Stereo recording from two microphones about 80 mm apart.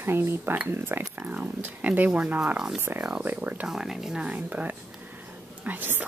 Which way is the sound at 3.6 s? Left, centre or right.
Centre.